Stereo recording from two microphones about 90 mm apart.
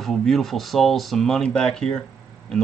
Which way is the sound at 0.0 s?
5° left (ahead or behind).